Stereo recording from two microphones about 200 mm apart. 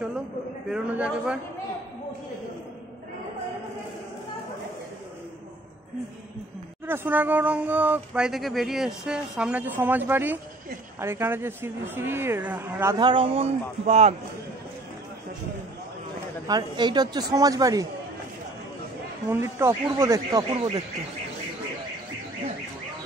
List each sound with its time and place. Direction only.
0.7 s a man's voice: 5° right (ahead or behind)
6.9 s speech: 10° right (ahead or behind)
12.9 s a woman's voice: 25° right (ahead or behind)
16.4 s a woman's voice: 20° right (ahead or behind)
19.2 s speech: 15° right (ahead or behind)
20.5 s speech: 30° right (ahead or behind)